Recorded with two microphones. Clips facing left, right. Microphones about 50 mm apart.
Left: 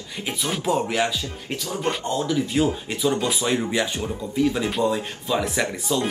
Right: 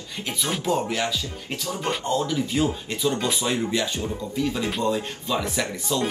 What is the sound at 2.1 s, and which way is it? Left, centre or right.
Speech, left.